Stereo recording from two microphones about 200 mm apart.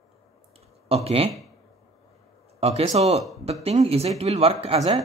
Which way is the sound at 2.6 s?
30° right (ahead or behind).